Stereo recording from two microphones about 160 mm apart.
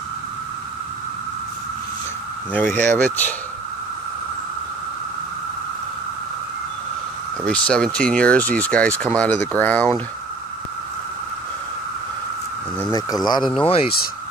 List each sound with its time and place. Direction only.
2.7 s speech: 10° left (ahead or behind)
7.4 s speech: 5° left (ahead or behind)
12.9 s speech: 25° left (ahead or behind)
13.6 s speech: 35° left (ahead or behind)